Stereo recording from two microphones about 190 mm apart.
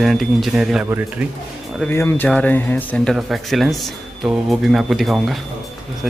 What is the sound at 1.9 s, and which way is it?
Speech, 15° left (ahead or behind).